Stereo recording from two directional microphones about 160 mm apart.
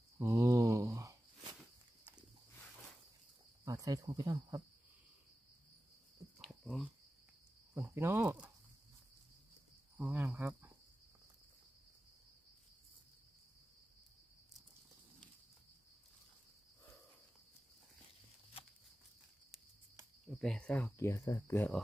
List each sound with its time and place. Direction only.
0.2 s a sound: 20° right (ahead or behind)
3.6 s cricket: 20° right (ahead or behind)
6.4 s a sound: centre (ahead or behind)
7.7 s cricket: 15° right (ahead or behind)
9.9 s cricket: 10° right (ahead or behind)
20.2 s cricket: 5° left (ahead or behind)
21.3 s speech: 15° left (ahead or behind)